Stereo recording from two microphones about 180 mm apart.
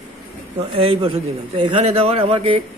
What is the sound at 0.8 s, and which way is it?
A man's voice, 30° right (ahead or behind).